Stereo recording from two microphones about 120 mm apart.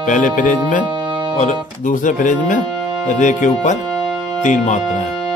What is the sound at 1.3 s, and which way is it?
Music, 85° left.